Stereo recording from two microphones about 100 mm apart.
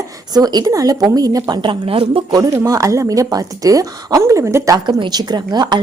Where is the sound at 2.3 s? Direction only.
35° right (ahead or behind).